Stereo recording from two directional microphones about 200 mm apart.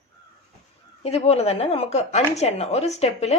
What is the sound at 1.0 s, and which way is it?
Speech, 30° left (ahead or behind).